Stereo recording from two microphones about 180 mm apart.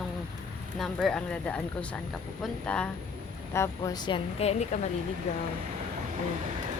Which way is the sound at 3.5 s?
20° left (ahead or behind).